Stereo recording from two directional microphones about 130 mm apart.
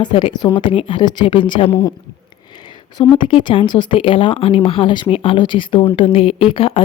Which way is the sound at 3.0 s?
40° left (ahead or behind).